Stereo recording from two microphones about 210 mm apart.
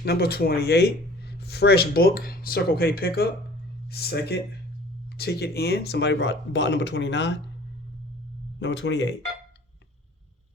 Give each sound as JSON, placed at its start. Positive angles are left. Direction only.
{"t": 0.0, "sound": "speech", "side_deg": 50}
{"t": 8.5, "sound": "speech", "side_deg": 60}